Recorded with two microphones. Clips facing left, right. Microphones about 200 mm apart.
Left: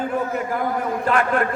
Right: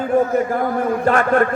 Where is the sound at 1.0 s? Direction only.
45° right (ahead or behind).